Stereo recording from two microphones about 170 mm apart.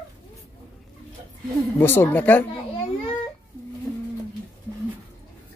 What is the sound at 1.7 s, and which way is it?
Speech, 15° left (ahead or behind).